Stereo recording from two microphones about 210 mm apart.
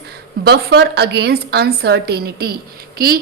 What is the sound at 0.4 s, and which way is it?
A woman's voice, 50° right (ahead or behind).